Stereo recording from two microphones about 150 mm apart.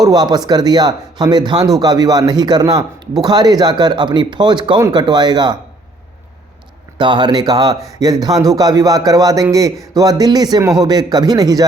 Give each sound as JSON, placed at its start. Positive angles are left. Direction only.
{"t": 0.0, "sound": "speech", "side_deg": -25}
{"t": 7.0, "sound": "speech", "side_deg": -30}